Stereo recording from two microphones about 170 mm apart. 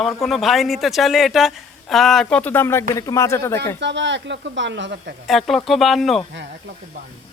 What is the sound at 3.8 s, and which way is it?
Speech, 90° right.